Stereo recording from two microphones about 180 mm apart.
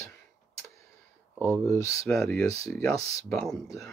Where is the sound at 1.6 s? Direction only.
15° left (ahead or behind).